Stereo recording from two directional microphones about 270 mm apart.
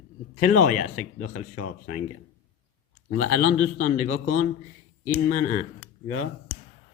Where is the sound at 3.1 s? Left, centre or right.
Left.